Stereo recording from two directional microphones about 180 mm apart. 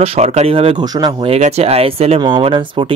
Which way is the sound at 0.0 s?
35° right (ahead or behind).